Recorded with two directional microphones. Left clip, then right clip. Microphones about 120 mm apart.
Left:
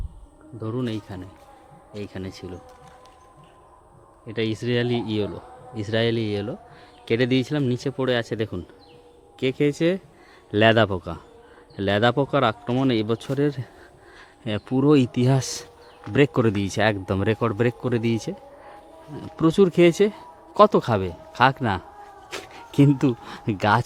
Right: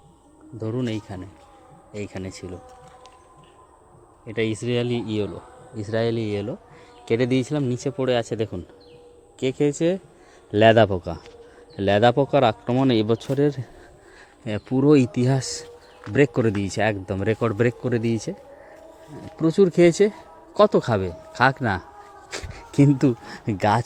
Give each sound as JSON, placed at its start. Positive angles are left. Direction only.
{"t": 0.9, "sound": "speech", "side_deg": -15}
{"t": 4.3, "sound": "speech", "side_deg": 5}
{"t": 5.7, "sound": "speech", "side_deg": 25}
{"t": 10.5, "sound": "speech", "side_deg": 0}
{"t": 15.4, "sound": "speech", "side_deg": 20}
{"t": 17.2, "sound": "speech", "side_deg": 10}
{"t": 19.4, "sound": "speech", "side_deg": 15}
{"t": 19.7, "sound": "speech", "side_deg": 0}
{"t": 20.5, "sound": "speech", "side_deg": 10}
{"t": 20.8, "sound": "speech", "side_deg": 0}